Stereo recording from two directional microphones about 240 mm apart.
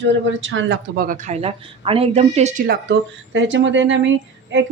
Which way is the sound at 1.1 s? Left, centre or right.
Right.